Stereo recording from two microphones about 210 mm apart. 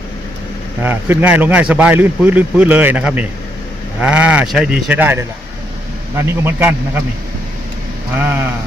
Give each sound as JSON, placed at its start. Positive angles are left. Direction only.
{"t": 0.8, "sound": "a man's voice", "side_deg": -10}